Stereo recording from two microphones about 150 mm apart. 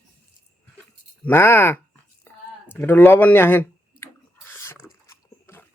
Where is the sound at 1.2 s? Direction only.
15° left (ahead or behind).